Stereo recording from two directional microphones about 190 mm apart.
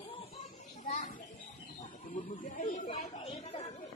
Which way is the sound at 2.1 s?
45° left (ahead or behind).